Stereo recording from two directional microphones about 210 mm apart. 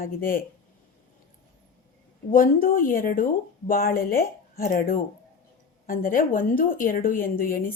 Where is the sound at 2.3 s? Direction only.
40° left (ahead or behind).